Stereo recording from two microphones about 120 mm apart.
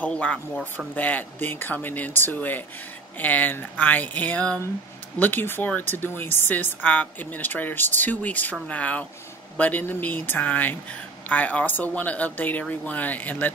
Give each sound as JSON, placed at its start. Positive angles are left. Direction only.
{"t": 0.0, "sound": "speech", "side_deg": 10}